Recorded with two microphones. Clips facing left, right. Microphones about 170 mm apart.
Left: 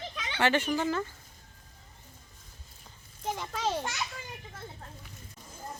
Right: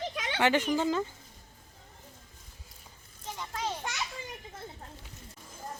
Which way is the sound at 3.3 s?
80° left.